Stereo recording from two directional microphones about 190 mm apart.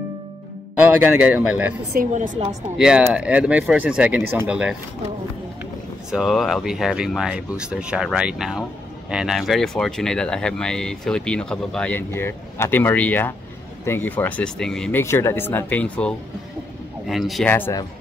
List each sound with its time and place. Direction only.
0.7 s speech: 5° right (ahead or behind)
1.9 s a woman's voice: 45° right (ahead or behind)
2.8 s speech: 5° right (ahead or behind)
6.1 s speech: centre (ahead or behind)
17.5 s speech: 10° left (ahead or behind)